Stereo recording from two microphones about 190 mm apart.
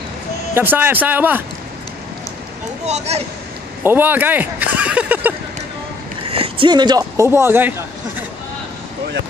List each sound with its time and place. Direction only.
0.6 s speech: 10° right (ahead or behind)
2.8 s speech: 35° right (ahead or behind)
3.8 s speech: 10° right (ahead or behind)
6.2 s speech: 30° right (ahead or behind); by 7.7 s 10° right (ahead or behind)